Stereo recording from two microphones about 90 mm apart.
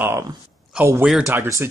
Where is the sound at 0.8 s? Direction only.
20° right (ahead or behind).